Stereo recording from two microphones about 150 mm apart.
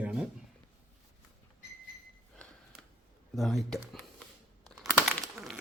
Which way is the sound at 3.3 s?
Centre (ahead or behind).